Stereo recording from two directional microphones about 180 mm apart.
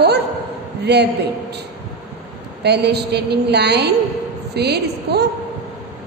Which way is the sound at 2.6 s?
65° right (ahead or behind).